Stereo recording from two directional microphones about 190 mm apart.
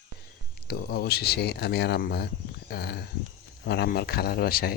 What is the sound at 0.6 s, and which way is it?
A man's voice, 55° left (ahead or behind).